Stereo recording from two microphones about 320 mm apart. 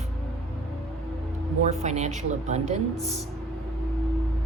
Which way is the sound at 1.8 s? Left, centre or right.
Right.